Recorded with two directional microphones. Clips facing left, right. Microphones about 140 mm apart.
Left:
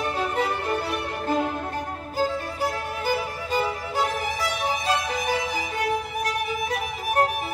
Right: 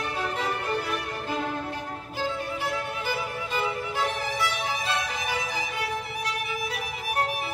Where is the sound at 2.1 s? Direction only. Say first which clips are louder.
Left 4 dB; 40° left (ahead or behind).